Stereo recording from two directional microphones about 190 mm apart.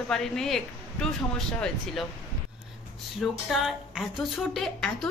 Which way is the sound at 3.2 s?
Centre (ahead or behind).